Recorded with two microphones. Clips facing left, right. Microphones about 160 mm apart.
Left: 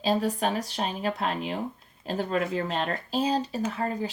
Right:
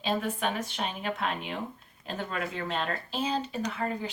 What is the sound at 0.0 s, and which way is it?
Speech, 35° left (ahead or behind).